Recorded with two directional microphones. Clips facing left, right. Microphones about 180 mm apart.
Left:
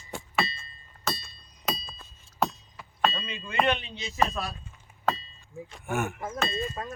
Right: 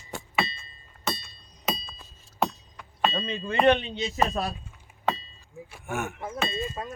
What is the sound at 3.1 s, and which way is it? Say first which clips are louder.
Speech: right 2 dB; 40° right (ahead or behind).